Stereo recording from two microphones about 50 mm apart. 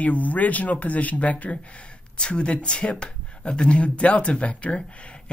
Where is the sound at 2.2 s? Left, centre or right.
Centre.